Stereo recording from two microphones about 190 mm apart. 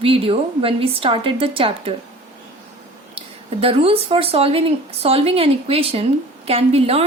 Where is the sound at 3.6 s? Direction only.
30° right (ahead or behind).